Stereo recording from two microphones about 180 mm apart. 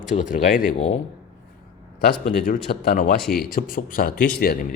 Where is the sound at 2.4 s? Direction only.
55° left (ahead or behind).